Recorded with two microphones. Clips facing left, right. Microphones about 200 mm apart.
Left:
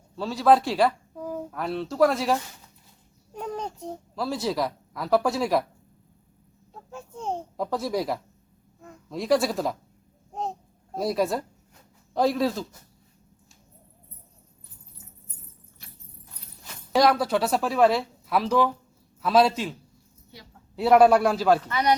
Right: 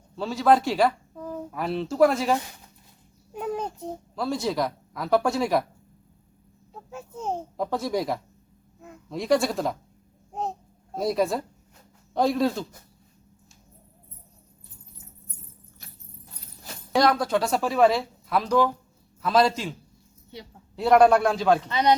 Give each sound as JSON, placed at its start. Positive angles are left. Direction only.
{"t": 0.2, "sound": "a woman's voice", "side_deg": 0}
{"t": 3.3, "sound": "a sound", "side_deg": -5}
{"t": 4.1, "sound": "a woman's voice", "side_deg": 0}
{"t": 6.9, "sound": "a sound", "side_deg": -5}
{"t": 8.8, "sound": "speech", "side_deg": 0}
{"t": 10.9, "sound": "a woman's voice", "side_deg": 0}
{"t": 16.9, "sound": "a woman's voice", "side_deg": 5}
{"t": 20.7, "sound": "a woman's voice", "side_deg": 5}
{"t": 21.7, "sound": "speech", "side_deg": -20}